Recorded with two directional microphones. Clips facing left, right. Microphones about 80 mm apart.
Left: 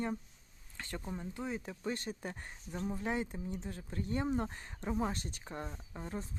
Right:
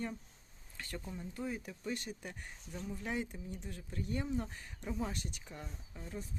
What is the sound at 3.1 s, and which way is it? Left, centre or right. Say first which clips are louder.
Speech: left 1 dB; left.